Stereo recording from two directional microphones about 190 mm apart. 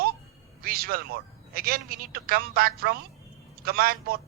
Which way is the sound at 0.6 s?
50° right (ahead or behind).